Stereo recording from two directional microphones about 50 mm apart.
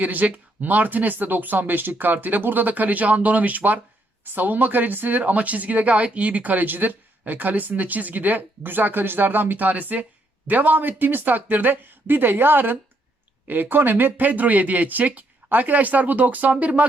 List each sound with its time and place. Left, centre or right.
0.0 s speech: right